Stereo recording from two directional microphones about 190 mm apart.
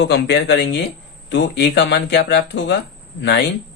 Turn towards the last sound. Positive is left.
turn(degrees=60)  # may be behind; listen again after turning